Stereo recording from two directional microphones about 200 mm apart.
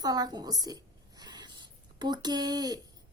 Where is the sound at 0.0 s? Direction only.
20° right (ahead or behind).